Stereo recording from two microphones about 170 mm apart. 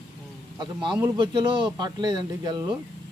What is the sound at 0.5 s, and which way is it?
A man's voice, 25° right (ahead or behind).